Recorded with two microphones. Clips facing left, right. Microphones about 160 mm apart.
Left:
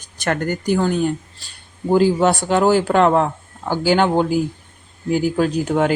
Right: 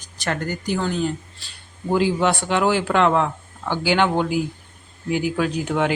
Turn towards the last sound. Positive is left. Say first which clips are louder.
# left 4 dB
turn(degrees=40)  # may be behind; listen again after turning